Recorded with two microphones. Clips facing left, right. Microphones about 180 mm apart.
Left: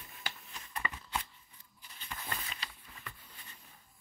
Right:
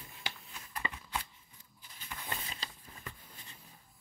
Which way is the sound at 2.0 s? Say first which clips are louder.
Even; 10° right (ahead or behind).